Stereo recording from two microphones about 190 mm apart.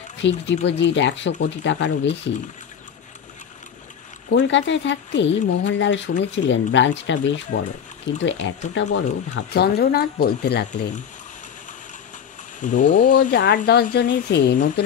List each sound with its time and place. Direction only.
0.2 s speech: 70° left (ahead or behind)
4.3 s speech: 70° left (ahead or behind)
12.5 s speech: 40° left (ahead or behind)
13.7 s speech: 60° left (ahead or behind)